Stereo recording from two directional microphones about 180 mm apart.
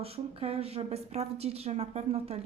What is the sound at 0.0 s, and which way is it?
Speech, 35° right (ahead or behind).